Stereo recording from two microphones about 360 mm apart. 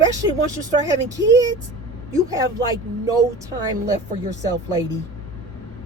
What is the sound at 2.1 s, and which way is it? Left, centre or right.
Speech, centre.